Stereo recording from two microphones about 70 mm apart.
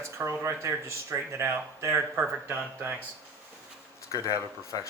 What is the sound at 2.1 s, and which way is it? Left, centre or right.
Speech, right.